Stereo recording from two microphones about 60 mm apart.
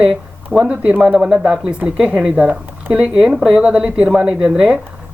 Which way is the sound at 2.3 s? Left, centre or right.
Right.